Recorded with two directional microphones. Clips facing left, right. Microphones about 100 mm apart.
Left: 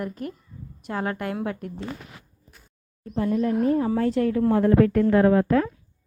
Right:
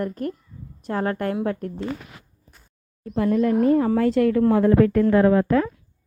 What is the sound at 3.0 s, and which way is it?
Speech, 70° right (ahead or behind).